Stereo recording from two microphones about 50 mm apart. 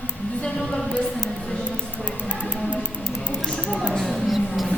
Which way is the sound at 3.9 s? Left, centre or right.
Centre.